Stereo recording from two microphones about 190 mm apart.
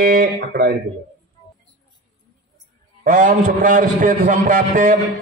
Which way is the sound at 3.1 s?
45° right (ahead or behind).